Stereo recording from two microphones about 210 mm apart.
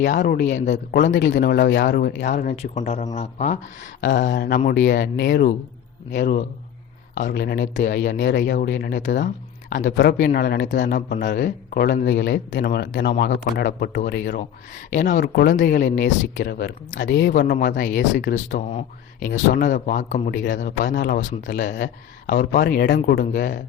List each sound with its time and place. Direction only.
0.0 s speech: 45° left (ahead or behind)
4.0 s speech: 55° left (ahead or behind)
10.8 s speech: 40° left (ahead or behind)
15.2 s speech: 50° left (ahead or behind)